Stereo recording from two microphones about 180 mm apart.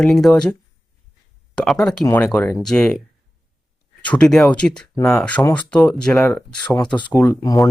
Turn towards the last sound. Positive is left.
turn(degrees=20)  # may be behind; listen again after turning